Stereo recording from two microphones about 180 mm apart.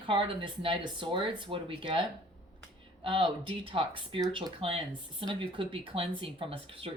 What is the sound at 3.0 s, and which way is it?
Speech, 30° right (ahead or behind).